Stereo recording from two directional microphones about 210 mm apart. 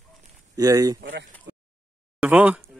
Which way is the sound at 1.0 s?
55° right (ahead or behind).